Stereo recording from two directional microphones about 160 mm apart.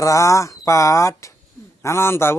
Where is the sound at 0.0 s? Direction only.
20° left (ahead or behind).